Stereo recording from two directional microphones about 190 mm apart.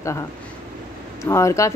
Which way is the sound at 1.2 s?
15° left (ahead or behind).